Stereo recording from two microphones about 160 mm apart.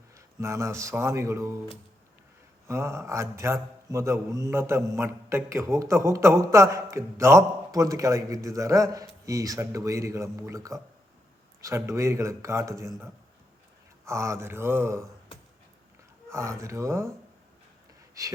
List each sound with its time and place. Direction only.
0.3 s mantra: 20° right (ahead or behind)
2.6 s mantra: 15° right (ahead or behind)
4.9 s a man's voice: 15° right (ahead or behind)
11.6 s mantra: 20° right (ahead or behind)
16.3 s mantra: 15° right (ahead or behind)
18.1 s speech: 20° right (ahead or behind)